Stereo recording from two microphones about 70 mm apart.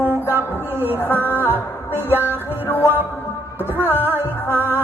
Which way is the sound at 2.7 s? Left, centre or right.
Left.